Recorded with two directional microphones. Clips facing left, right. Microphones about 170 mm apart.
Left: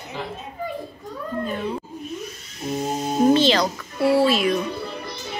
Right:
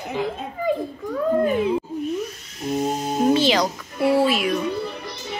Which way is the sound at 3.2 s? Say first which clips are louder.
Left 1 dB; 10° right (ahead or behind).